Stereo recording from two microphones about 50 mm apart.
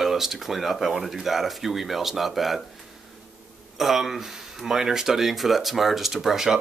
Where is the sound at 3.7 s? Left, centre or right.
Centre.